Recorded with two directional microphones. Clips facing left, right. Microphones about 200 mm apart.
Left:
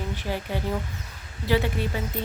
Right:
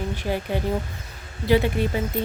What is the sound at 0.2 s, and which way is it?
A woman's voice, 20° right (ahead or behind).